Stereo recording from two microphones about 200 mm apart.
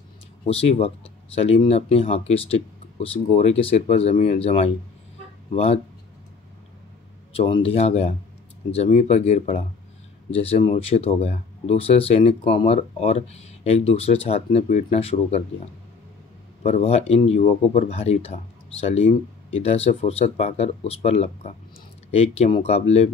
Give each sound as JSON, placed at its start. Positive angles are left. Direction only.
{"t": 0.5, "sound": "speech", "side_deg": 30}
{"t": 7.3, "sound": "speech", "side_deg": 30}
{"t": 16.6, "sound": "speech", "side_deg": 30}